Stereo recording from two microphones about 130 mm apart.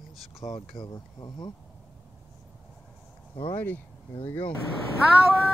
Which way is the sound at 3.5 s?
15° left (ahead or behind).